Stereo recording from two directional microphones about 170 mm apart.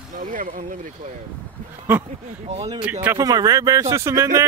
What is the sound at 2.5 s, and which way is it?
Speech, 35° right (ahead or behind).